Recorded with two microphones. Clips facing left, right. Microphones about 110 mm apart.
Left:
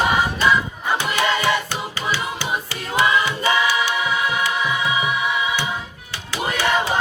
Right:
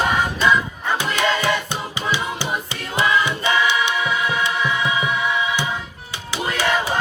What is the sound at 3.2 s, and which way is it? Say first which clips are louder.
Choir: even; 20° right (ahead or behind).